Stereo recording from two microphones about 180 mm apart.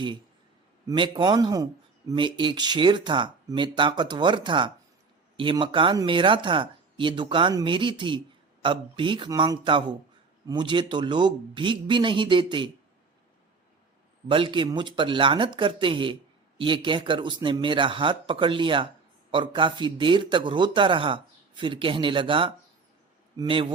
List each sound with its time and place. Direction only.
0.9 s a man's voice: 25° right (ahead or behind)
14.3 s a man's voice: 25° right (ahead or behind)